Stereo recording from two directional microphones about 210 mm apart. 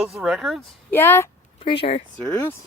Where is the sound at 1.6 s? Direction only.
25° left (ahead or behind).